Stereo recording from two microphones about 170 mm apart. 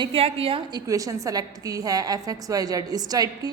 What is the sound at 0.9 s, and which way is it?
A woman's voice, 20° right (ahead or behind).